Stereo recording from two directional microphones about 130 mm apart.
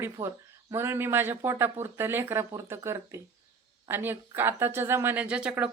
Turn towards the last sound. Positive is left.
turn(degrees=-10)  # may be behind; listen again after turning